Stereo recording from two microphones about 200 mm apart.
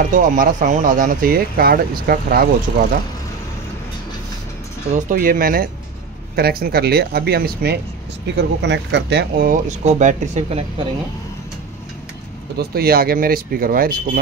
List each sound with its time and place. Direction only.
0.1 s speech: 40° right (ahead or behind)
4.9 s speech: 45° right (ahead or behind); by 9.5 s 60° right (ahead or behind)
9.5 s speech: 35° right (ahead or behind)
12.5 s speech: 50° right (ahead or behind)